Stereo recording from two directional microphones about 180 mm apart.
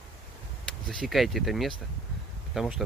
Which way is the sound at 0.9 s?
Centre (ahead or behind).